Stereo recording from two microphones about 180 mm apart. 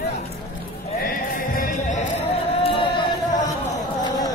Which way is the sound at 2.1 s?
35° left (ahead or behind).